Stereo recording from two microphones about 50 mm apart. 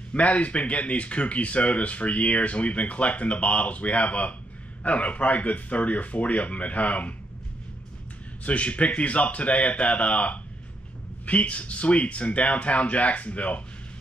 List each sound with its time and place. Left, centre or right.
0.1 s speech: left
8.5 s speech: left